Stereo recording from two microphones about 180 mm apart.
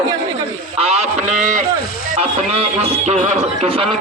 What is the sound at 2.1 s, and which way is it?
Speech, 35° right (ahead or behind).